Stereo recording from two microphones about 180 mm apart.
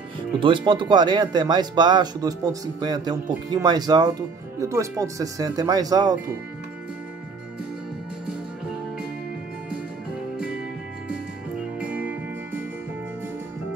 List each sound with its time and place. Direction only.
0.4 s speech: 25° right (ahead or behind)
11.8 s music: 5° right (ahead or behind)